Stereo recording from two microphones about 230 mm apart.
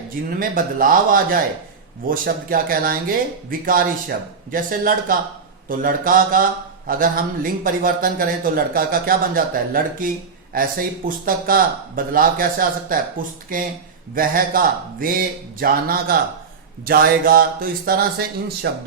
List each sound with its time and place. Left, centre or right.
0.3 s speech: right